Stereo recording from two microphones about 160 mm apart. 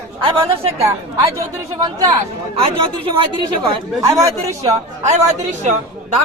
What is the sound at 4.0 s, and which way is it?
Speech, 20° right (ahead or behind).